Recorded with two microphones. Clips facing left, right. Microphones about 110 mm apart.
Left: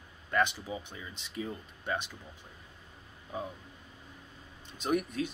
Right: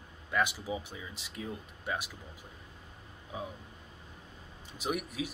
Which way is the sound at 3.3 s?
5° right (ahead or behind).